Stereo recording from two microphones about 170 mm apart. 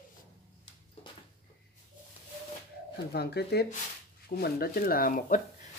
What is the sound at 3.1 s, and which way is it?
Speech, 70° left (ahead or behind).